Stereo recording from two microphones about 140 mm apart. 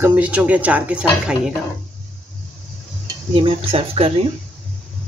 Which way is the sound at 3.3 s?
40° right (ahead or behind).